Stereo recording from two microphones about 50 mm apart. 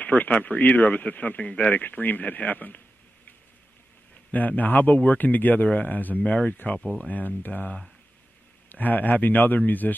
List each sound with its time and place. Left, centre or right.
0.0 s a man's voice: left
1.8 s a man's voice: left
4.3 s a man's voice: left